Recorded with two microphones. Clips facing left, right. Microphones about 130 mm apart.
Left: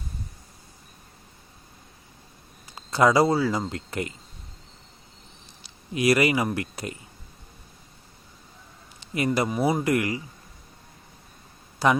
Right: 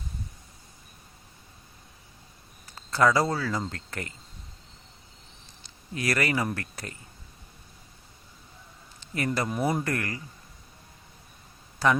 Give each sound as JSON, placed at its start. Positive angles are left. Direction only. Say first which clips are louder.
{"t": 2.7, "sound": "speech", "louder": "left 3 dB", "side_deg": 15}
{"t": 5.9, "sound": "speech", "louder": "left 7 dB", "side_deg": 15}
{"t": 9.1, "sound": "speech", "louder": "left 4 dB", "side_deg": 15}